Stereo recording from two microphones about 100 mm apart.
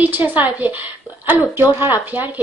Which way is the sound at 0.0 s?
15° right (ahead or behind).